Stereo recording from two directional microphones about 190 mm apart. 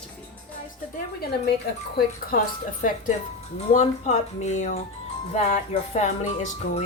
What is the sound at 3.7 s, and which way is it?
Music, 40° left (ahead or behind).